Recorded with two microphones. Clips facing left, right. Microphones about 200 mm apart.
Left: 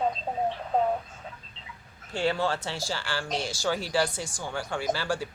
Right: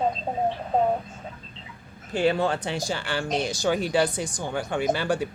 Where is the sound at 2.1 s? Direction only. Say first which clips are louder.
Right 4 dB; 20° right (ahead or behind).